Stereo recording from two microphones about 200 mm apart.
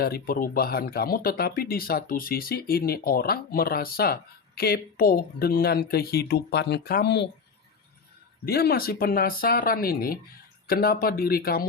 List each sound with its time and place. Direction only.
0.0 s speech: 50° left (ahead or behind)
8.4 s speech: 50° left (ahead or behind)